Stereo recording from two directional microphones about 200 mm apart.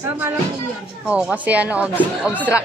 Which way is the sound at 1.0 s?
5° right (ahead or behind).